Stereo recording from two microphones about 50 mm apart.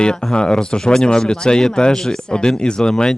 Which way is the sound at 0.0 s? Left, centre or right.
Centre.